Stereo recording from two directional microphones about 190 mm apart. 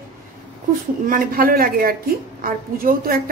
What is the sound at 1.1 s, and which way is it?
A woman's voice, 50° right (ahead or behind).